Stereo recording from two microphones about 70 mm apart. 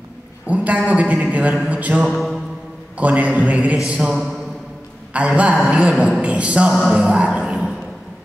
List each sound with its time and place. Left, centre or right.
0.5 s a man's voice: centre
2.1 s mantra: centre
3.0 s a man's voice: right
4.1 s a sound: centre
5.1 s speech: centre
7.0 s music: centre